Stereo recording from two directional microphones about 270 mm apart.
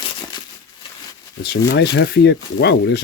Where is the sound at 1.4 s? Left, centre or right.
Left.